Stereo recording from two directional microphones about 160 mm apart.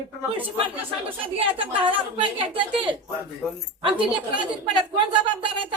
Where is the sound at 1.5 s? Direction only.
35° right (ahead or behind).